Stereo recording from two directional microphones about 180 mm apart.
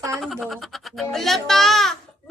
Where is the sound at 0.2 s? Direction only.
Centre (ahead or behind).